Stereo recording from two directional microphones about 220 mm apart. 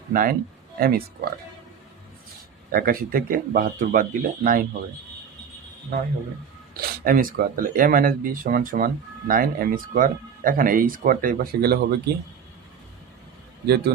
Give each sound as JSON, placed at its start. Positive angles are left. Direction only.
{"t": 0.1, "sound": "speech", "side_deg": -40}
{"t": 2.7, "sound": "speech", "side_deg": -40}
{"t": 7.0, "sound": "speech", "side_deg": -40}
{"t": 13.7, "sound": "speech", "side_deg": -50}